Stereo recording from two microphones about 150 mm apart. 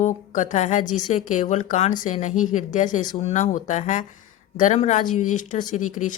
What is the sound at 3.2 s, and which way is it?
A woman's voice, 45° left (ahead or behind).